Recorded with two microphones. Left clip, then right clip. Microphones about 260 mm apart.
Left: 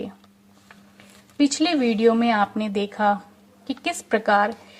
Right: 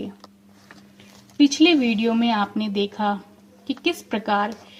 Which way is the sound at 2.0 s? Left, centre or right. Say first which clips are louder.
Left 3 dB; left.